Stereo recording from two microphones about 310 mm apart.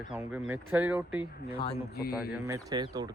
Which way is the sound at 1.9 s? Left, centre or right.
Left.